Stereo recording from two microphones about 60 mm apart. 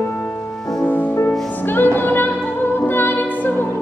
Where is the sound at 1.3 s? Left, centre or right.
Left.